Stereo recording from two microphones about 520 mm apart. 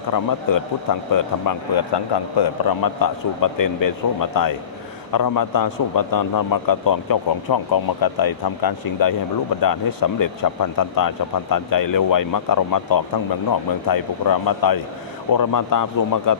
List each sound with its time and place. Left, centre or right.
0.1 s a man's voice: left